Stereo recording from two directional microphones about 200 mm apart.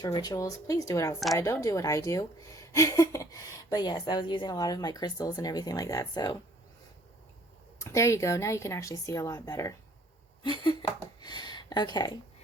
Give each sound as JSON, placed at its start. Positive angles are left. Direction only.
{"t": 0.0, "sound": "a woman's voice", "side_deg": 20}
{"t": 7.8, "sound": "a woman's voice", "side_deg": 15}